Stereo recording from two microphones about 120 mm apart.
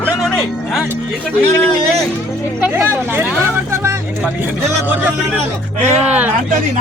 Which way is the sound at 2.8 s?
20° right (ahead or behind).